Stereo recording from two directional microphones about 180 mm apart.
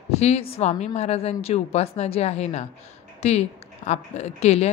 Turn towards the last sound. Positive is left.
turn(degrees=35)  # may be behind; listen again after turning